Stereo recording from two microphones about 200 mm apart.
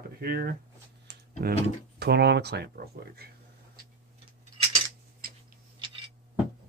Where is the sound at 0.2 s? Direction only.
50° right (ahead or behind).